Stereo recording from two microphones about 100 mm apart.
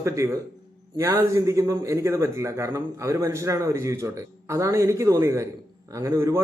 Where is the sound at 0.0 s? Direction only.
30° right (ahead or behind).